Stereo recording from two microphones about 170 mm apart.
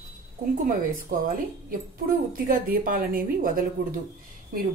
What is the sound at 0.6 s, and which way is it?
A woman's voice, 50° right (ahead or behind).